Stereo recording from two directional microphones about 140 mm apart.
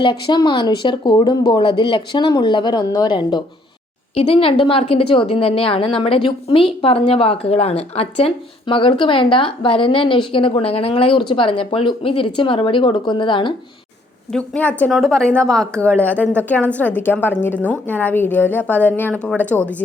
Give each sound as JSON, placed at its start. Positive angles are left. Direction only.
{"t": 0.0, "sound": "a woman's voice", "side_deg": 30}
{"t": 4.1, "sound": "a woman's voice", "side_deg": 45}
{"t": 14.3, "sound": "a woman's voice", "side_deg": 10}